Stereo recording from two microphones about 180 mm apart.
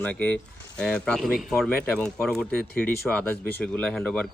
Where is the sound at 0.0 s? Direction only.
10° left (ahead or behind).